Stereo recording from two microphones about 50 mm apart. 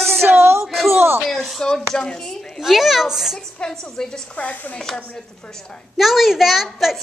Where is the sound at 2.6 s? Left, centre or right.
Centre.